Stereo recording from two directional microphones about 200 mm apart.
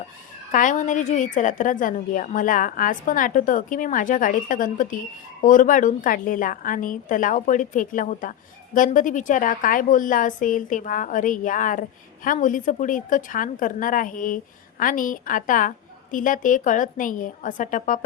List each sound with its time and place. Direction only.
0.5 s a woman's voice: 40° left (ahead or behind)